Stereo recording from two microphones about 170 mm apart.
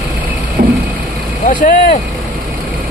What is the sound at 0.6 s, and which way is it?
Vehicle, 65° right (ahead or behind).